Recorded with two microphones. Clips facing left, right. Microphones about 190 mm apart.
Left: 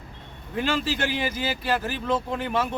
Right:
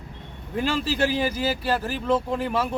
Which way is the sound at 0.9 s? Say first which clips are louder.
Right 4 dB; 35° right (ahead or behind).